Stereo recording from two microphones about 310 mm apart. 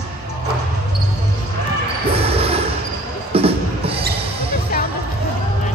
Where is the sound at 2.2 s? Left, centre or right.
Centre.